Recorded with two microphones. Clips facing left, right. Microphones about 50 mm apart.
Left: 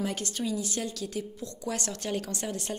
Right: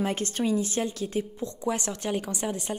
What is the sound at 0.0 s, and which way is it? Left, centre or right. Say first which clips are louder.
A woman's voice: right 4 dB; right.